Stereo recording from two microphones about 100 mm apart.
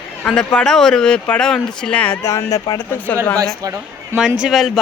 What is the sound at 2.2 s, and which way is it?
Speech, 30° left (ahead or behind).